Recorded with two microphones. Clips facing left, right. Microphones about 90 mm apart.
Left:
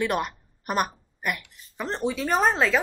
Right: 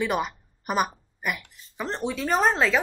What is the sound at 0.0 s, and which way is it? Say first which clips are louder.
A woman's voice: even; centre (ahead or behind).